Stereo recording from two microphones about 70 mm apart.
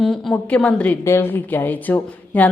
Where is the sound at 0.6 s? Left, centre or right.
Centre.